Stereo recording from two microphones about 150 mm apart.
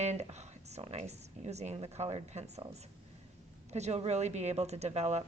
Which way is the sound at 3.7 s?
45° right (ahead or behind).